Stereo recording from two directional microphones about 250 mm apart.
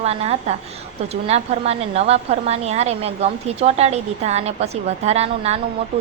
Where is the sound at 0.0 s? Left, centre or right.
Right.